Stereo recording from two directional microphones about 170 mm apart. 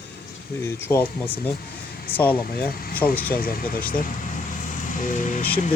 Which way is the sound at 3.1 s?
10° left (ahead or behind).